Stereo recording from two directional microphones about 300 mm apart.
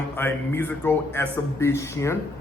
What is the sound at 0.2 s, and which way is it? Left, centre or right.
A man's voice, centre.